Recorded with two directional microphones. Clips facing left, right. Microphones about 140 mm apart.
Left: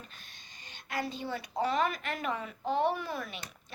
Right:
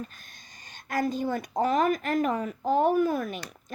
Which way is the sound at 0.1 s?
45° right (ahead or behind).